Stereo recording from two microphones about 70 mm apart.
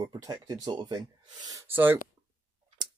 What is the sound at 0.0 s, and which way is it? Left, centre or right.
Speech, right.